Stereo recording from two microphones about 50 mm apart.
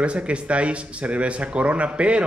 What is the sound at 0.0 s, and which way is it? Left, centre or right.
A woman's voice, right.